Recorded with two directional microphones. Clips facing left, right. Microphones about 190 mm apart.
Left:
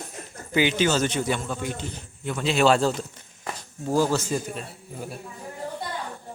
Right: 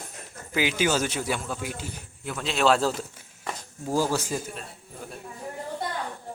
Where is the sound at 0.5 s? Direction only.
Centre (ahead or behind).